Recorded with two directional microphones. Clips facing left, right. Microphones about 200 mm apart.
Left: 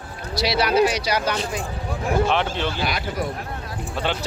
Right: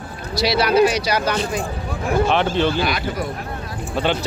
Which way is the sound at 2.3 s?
5° left (ahead or behind).